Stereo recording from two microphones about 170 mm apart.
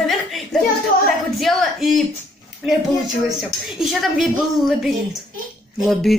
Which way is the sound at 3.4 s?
Centre (ahead or behind).